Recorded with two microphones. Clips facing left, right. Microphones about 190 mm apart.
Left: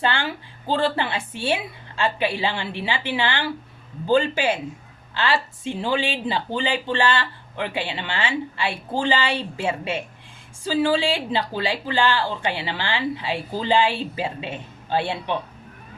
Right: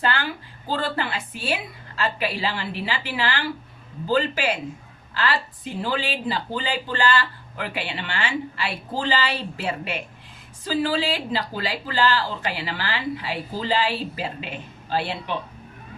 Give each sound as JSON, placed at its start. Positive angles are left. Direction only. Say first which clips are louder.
{"t": 0.0, "sound": "a sound", "louder": "left 1 dB", "side_deg": 25}
{"t": 0.7, "sound": "speech", "louder": "left 4 dB", "side_deg": 25}
{"t": 11.1, "sound": "speech", "louder": "left 2 dB", "side_deg": 25}